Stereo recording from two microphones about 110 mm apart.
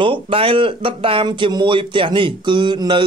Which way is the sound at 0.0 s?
55° right (ahead or behind).